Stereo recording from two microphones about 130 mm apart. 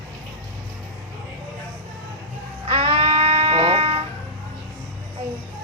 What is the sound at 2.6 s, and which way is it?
Music, 45° right (ahead or behind).